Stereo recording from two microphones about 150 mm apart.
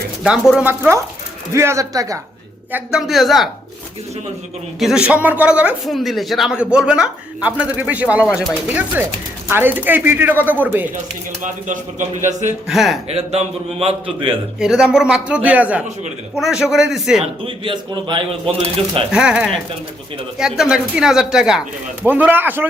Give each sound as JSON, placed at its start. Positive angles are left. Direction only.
{"t": 0.2, "sound": "speech", "side_deg": -5}
{"t": 2.7, "sound": "speech", "side_deg": -5}
{"t": 4.8, "sound": "speech", "side_deg": -5}
{"t": 11.4, "sound": "speech", "side_deg": -55}
{"t": 12.6, "sound": "speech", "side_deg": 0}
{"t": 13.1, "sound": "a man's voice", "side_deg": -40}
{"t": 14.6, "sound": "speech", "side_deg": -5}
{"t": 17.4, "sound": "a man's voice", "side_deg": -35}
{"t": 19.1, "sound": "speech", "side_deg": -5}